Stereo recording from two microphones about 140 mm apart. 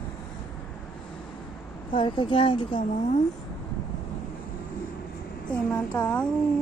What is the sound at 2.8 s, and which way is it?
Speech, 65° left (ahead or behind).